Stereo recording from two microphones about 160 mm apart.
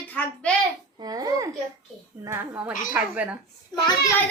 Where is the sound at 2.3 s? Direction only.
10° right (ahead or behind).